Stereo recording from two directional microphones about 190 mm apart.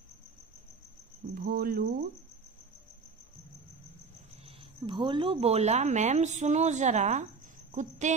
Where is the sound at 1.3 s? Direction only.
50° right (ahead or behind).